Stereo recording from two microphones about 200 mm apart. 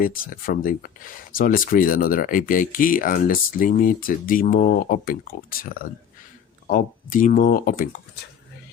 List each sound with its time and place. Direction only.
0.0 s speech: 45° left (ahead or behind)